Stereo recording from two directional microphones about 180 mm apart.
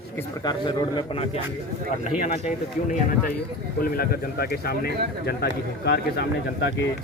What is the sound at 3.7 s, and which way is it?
Speech, 55° left (ahead or behind).